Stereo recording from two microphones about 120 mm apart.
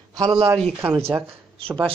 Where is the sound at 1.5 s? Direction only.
50° right (ahead or behind).